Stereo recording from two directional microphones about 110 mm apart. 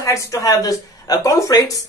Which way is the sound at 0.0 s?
30° left (ahead or behind).